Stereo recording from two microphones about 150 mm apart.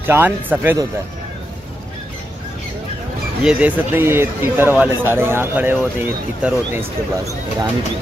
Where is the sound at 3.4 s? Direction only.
10° right (ahead or behind).